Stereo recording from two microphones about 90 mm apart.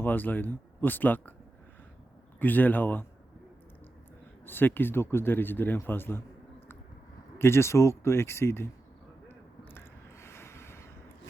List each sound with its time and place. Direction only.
0.0 s speech: 20° left (ahead or behind)
2.4 s speech: 20° left (ahead or behind)
4.4 s speech: 25° left (ahead or behind)
7.3 s speech: 30° left (ahead or behind)
9.6 s a sound: 25° left (ahead or behind)